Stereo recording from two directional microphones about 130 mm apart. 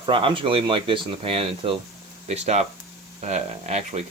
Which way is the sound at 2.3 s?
60° right (ahead or behind).